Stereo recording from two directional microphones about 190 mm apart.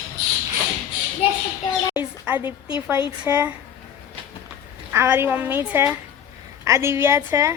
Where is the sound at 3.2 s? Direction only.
10° right (ahead or behind).